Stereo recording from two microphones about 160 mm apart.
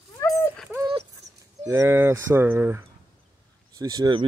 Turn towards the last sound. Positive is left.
turn(degrees=-25)  # may be behind; listen again after turning